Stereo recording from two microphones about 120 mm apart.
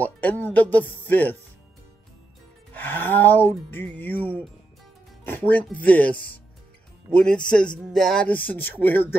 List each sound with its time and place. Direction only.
0.0 s speech: 15° left (ahead or behind)
2.7 s speech: 15° left (ahead or behind)